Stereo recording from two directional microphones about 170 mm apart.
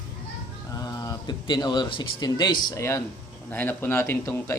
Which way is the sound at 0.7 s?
20° left (ahead or behind).